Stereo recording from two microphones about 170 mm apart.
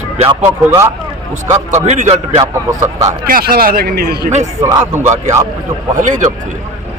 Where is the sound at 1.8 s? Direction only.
40° right (ahead or behind).